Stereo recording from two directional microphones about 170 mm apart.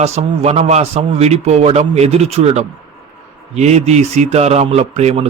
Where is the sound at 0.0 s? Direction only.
40° right (ahead or behind).